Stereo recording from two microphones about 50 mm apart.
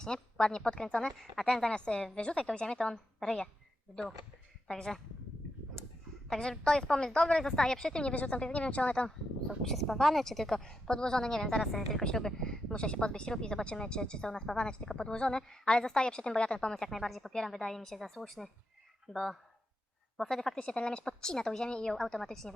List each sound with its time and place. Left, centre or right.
0.0 s speech: centre
1.2 s speech: centre
1.7 s a woman's voice: centre
4.7 s speech: centre
6.2 s speech: centre
8.0 s a woman's voice: left
9.6 s speech: centre
16.7 s a woman's voice: centre